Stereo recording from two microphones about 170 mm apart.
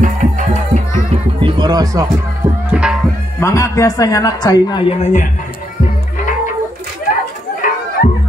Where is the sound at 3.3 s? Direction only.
15° left (ahead or behind).